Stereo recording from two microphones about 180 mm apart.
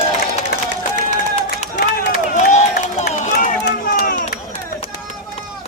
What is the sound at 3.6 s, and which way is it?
Run, 55° left (ahead or behind).